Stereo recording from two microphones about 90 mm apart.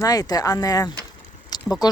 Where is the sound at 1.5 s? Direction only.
50° left (ahead or behind).